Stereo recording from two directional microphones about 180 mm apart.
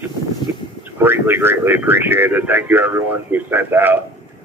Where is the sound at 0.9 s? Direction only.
10° right (ahead or behind).